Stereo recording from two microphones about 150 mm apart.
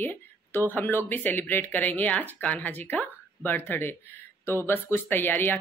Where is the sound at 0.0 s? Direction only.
15° left (ahead or behind).